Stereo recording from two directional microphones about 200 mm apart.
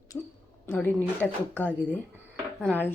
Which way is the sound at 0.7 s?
10° left (ahead or behind).